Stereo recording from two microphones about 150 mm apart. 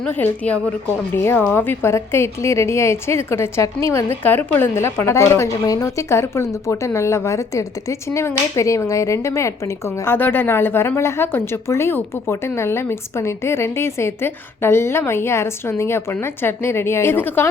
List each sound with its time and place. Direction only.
0.0 s a woman's voice: 10° left (ahead or behind)